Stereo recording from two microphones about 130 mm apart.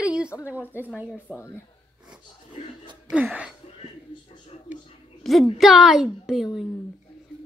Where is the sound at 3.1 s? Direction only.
10° right (ahead or behind).